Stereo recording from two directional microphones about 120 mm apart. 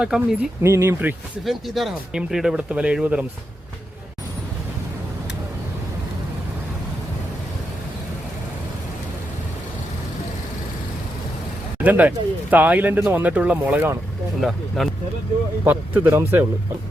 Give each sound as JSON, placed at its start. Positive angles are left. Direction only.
{"t": 0.0, "sound": "speech", "side_deg": -5}
{"t": 0.6, "sound": "speech", "side_deg": -20}
{"t": 1.5, "sound": "speech", "side_deg": 0}
{"t": 11.8, "sound": "speech", "side_deg": -15}
{"t": 14.4, "sound": "speech", "side_deg": 0}
{"t": 15.6, "sound": "speech", "side_deg": -15}